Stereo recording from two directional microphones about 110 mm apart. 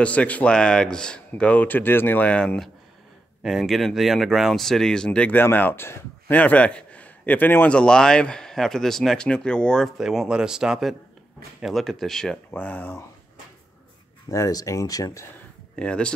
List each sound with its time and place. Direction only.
0.0 s speech: 10° left (ahead or behind)
9.9 s speech: 5° right (ahead or behind)
12.4 s speech: 15° left (ahead or behind)
14.3 s speech: 30° left (ahead or behind)
15.7 s speech: 10° left (ahead or behind)